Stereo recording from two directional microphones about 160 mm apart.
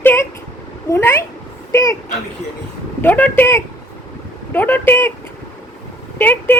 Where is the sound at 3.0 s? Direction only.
10° left (ahead or behind).